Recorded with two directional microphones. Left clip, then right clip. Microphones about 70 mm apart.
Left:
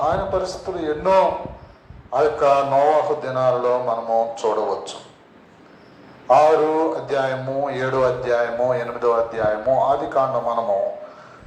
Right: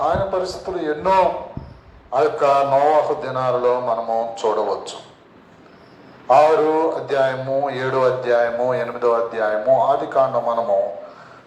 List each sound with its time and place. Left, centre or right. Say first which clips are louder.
0.0 s a man's voice: right 1 dB; right
6.2 s a man's voice: right 1 dB; right